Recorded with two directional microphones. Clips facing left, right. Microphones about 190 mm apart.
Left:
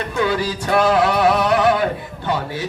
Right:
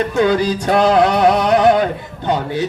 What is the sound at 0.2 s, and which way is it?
Music, 20° right (ahead or behind).